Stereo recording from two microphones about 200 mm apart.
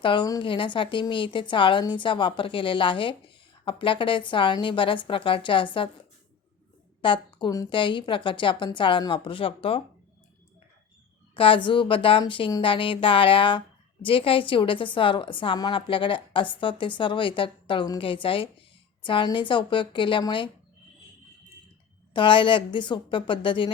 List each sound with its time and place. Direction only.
0.0 s a woman's voice: 25° left (ahead or behind)
7.0 s a woman's voice: 25° left (ahead or behind)
11.3 s a woman's voice: 25° left (ahead or behind)
22.1 s a woman's voice: 25° left (ahead or behind)